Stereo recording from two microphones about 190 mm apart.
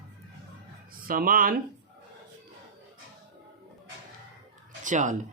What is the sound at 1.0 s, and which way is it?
Speech, 50° right (ahead or behind).